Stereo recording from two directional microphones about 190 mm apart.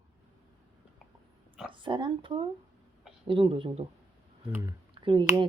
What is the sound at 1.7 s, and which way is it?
A woman's voice, 25° right (ahead or behind).